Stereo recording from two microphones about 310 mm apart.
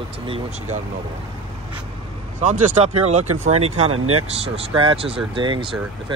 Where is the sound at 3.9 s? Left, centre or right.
Right.